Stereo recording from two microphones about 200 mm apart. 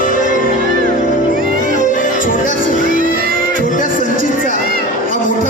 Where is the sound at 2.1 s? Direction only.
40° left (ahead or behind).